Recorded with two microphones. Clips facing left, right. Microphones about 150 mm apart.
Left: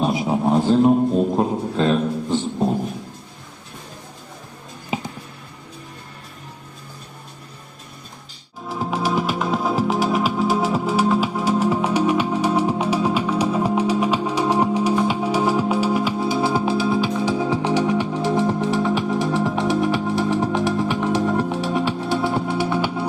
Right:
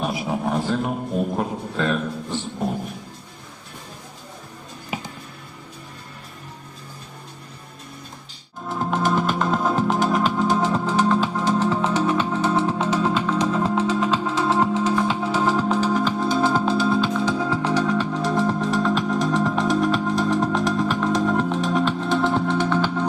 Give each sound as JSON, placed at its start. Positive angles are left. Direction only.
{"t": 0.0, "sound": "a sound", "side_deg": 25}
{"t": 4.9, "sound": "music", "side_deg": 25}
{"t": 8.7, "sound": "music", "side_deg": 5}